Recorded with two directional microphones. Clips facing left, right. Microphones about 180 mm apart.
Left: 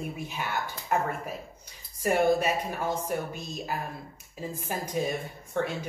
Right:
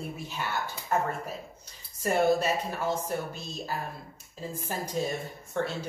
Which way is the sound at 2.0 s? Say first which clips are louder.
Left 1 dB; 15° left (ahead or behind).